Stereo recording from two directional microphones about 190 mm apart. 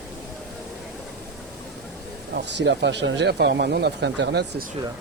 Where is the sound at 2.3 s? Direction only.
65° right (ahead or behind).